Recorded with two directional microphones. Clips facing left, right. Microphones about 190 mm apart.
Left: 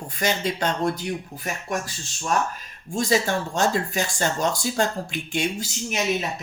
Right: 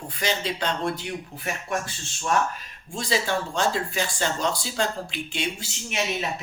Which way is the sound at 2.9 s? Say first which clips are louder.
Left 4 dB; 45° left (ahead or behind).